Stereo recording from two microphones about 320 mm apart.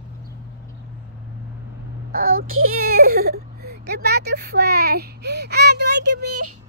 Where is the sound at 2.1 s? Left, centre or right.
Right.